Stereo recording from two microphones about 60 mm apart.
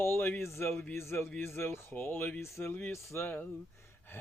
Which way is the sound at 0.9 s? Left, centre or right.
Left.